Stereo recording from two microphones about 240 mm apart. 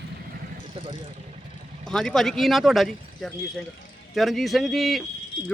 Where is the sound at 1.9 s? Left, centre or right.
Centre.